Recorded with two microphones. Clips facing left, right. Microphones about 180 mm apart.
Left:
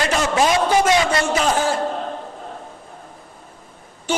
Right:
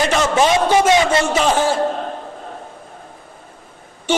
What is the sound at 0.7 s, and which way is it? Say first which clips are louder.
A man's voice: right 3 dB; 25° right (ahead or behind).